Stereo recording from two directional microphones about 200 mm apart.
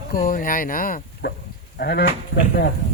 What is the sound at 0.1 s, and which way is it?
Speech, 45° left (ahead or behind).